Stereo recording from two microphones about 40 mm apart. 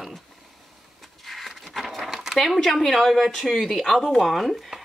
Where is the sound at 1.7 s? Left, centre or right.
Centre.